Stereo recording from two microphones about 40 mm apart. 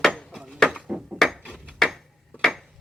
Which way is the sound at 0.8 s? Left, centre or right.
Centre.